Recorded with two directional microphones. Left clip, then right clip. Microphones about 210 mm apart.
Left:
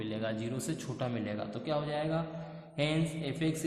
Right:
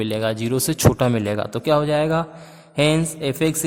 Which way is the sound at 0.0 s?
50° right (ahead or behind).